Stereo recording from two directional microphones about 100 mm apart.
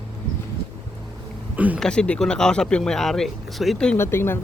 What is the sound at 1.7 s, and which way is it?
Speech, 10° left (ahead or behind).